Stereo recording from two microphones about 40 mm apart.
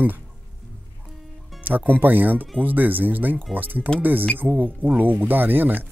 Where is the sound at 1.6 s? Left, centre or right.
Right.